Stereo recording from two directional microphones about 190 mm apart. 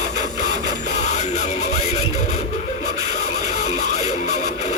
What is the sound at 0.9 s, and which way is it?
Music, 35° left (ahead or behind).